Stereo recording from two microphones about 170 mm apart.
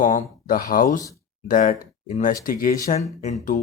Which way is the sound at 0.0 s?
50° left (ahead or behind).